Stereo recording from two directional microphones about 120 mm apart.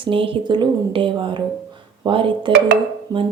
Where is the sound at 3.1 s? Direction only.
30° right (ahead or behind).